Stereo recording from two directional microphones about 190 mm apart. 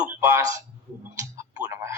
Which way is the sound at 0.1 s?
10° right (ahead or behind).